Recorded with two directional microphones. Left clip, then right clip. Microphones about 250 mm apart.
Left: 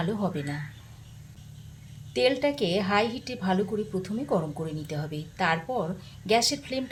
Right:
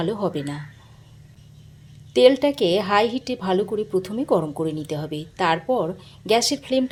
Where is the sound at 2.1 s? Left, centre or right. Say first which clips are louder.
Right 9 dB; right.